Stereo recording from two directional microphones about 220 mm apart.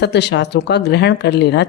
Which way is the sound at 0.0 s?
50° left (ahead or behind).